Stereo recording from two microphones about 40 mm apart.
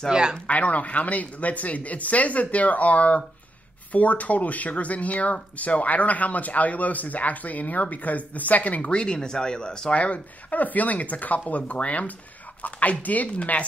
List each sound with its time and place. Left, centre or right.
0.1 s speech: centre
0.5 s speech: left
8.9 s speech: left
9.9 s speech: left